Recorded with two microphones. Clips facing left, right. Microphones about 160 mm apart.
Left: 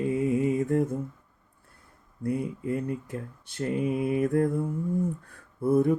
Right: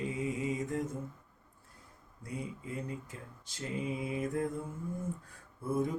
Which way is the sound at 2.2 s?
60° left (ahead or behind).